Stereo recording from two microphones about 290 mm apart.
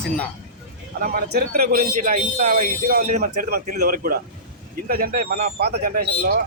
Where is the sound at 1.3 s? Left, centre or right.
Right.